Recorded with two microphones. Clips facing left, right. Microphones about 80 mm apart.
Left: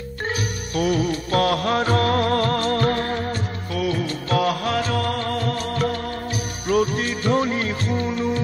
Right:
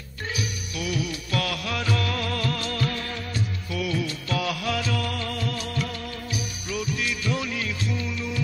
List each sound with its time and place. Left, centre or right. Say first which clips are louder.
0.3 s music: left 5 dB; left